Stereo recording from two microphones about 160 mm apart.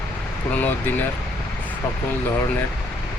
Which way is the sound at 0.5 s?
10° left (ahead or behind).